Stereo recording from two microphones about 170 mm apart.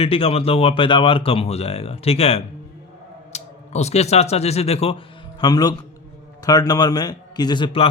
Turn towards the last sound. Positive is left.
turn(degrees=30)  # may be behind; listen again after turning